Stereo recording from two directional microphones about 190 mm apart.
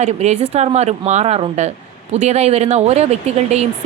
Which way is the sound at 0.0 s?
35° right (ahead or behind).